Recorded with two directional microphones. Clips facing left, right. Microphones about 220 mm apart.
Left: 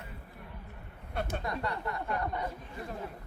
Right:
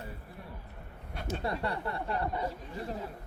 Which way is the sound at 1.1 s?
55° left (ahead or behind).